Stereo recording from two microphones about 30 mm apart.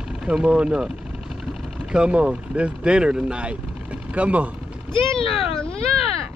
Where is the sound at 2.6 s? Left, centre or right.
Right.